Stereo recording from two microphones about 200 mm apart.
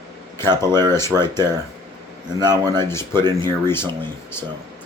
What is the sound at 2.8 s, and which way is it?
Speech, 10° left (ahead or behind).